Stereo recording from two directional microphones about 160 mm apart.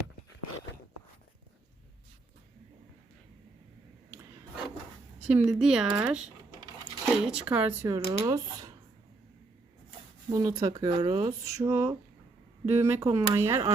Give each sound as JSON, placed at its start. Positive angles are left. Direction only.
{"t": 5.2, "sound": "speech", "side_deg": -10}
{"t": 7.9, "sound": "speech", "side_deg": -20}
{"t": 10.2, "sound": "speech", "side_deg": -25}